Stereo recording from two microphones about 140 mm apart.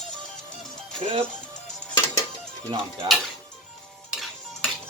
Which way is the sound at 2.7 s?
35° right (ahead or behind).